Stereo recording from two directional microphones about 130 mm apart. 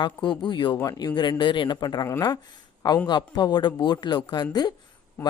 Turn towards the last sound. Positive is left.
turn(degrees=35)  # may be behind; listen again after turning